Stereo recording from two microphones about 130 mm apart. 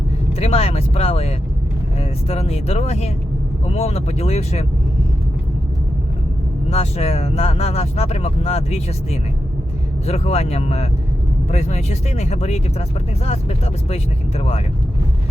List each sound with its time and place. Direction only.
0.3 s speech: 55° left (ahead or behind)
6.7 s speech: 55° left (ahead or behind)